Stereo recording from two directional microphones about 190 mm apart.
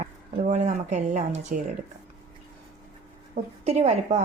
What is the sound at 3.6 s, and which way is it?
Speech, 35° right (ahead or behind).